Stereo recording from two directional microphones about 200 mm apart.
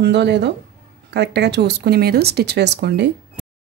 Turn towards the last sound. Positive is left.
turn(degrees=-60)  # may be behind; listen again after turning